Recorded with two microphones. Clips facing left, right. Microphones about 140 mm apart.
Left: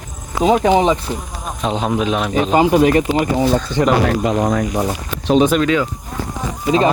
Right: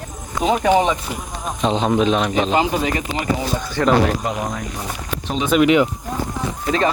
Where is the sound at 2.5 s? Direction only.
50° left (ahead or behind).